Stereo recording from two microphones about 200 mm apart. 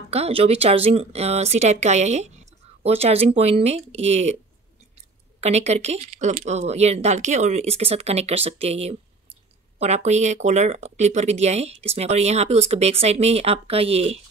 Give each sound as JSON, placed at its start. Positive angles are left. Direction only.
{"t": 0.1, "sound": "speech", "side_deg": -30}
{"t": 5.4, "sound": "speech", "side_deg": -35}